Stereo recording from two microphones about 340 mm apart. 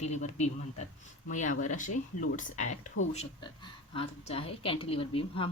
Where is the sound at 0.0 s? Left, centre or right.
Centre.